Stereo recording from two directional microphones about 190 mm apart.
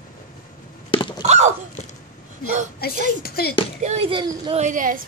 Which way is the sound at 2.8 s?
55° left (ahead or behind).